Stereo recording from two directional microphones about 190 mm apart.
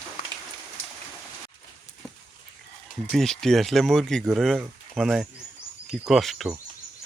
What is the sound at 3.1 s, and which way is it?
Speech, centre (ahead or behind).